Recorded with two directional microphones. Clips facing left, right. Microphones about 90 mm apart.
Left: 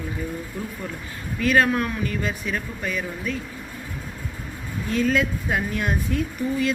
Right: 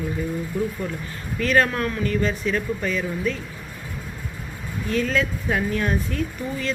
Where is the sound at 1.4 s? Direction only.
10° left (ahead or behind).